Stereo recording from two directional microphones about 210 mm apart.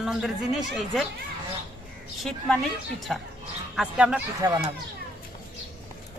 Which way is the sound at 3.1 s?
Centre (ahead or behind).